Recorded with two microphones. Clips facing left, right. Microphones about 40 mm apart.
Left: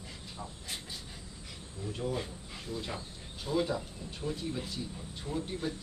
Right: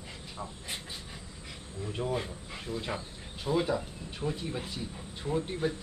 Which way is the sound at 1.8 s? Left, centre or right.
Right.